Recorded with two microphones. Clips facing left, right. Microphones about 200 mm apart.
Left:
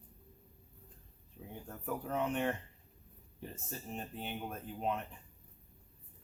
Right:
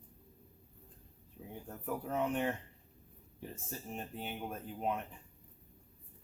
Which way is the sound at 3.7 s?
10° right (ahead or behind).